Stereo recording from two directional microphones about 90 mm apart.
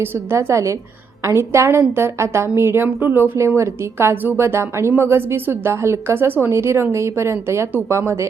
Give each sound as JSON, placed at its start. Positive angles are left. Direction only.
{"t": 0.0, "sound": "a woman's voice", "side_deg": -30}